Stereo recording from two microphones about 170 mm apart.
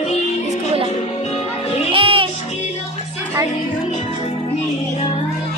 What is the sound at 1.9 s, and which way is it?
Music, 30° right (ahead or behind).